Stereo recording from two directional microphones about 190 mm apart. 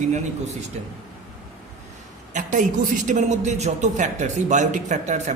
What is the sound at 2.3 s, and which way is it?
A woman's voice, 40° right (ahead or behind).